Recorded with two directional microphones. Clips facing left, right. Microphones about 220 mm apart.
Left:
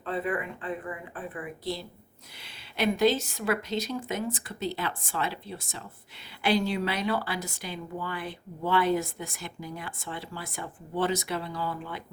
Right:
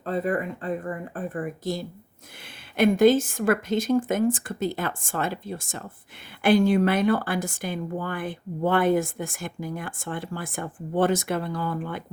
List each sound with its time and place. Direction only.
0.0 s speech: 40° right (ahead or behind)